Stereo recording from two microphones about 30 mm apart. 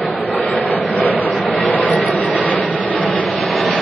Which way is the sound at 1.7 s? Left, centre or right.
Left.